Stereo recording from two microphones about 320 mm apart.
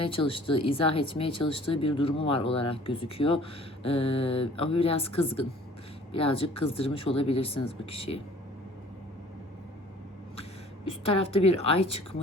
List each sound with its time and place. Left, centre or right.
0.0 s speech: centre
11.3 s speech: centre